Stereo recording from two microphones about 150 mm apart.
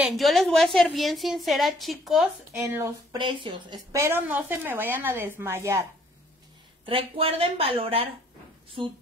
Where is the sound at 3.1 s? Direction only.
35° right (ahead or behind); by 5.9 s 15° right (ahead or behind).